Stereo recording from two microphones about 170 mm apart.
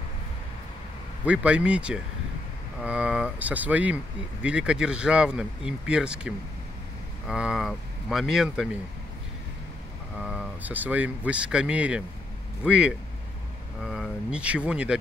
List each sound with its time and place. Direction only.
1.2 s speech: 5° right (ahead or behind)
10.1 s speech: 5° right (ahead or behind)